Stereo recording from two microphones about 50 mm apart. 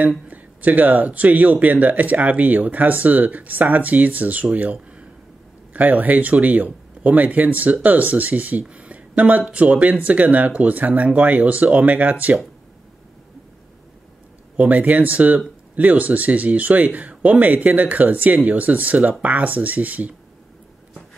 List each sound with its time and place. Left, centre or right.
0.3 s speech: right
8.7 s a sound: right
9.5 s speech: right
14.6 s speech: right